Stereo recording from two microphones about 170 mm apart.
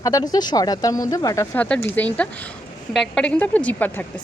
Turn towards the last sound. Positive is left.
turn(degrees=10)  # may be behind; listen again after turning